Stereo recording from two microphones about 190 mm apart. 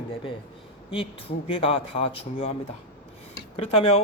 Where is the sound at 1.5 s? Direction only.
30° left (ahead or behind).